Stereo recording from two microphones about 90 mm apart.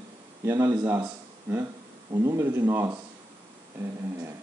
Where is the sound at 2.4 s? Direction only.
30° right (ahead or behind).